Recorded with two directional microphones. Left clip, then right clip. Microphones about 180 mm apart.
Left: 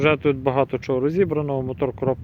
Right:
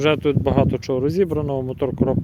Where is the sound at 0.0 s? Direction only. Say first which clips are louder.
Even; 25° right (ahead or behind).